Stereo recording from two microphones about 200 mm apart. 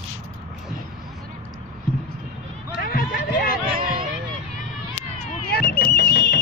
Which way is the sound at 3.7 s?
45° right (ahead or behind).